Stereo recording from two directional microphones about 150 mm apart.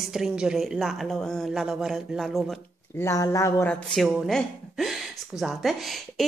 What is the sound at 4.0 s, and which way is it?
Speech, centre (ahead or behind).